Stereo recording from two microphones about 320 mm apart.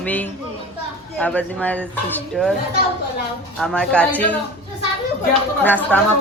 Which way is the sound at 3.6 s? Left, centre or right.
Centre.